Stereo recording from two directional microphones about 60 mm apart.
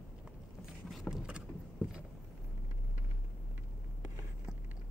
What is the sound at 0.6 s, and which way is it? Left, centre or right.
Vehicle, centre.